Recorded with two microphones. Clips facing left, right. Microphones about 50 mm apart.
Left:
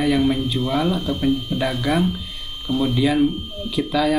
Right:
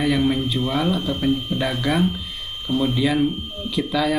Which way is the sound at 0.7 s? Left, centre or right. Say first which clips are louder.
Left 2 dB; centre.